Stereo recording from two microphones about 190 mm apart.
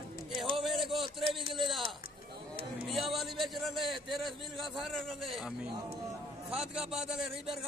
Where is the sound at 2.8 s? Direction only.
Centre (ahead or behind).